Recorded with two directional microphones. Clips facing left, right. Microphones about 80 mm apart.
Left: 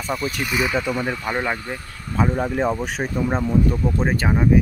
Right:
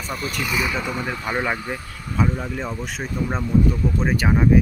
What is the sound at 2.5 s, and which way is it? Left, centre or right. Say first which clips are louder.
Speech: left 6 dB; left.